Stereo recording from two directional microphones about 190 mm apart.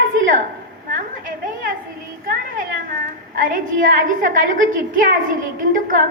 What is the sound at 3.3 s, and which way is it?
A woman's voice, 45° right (ahead or behind).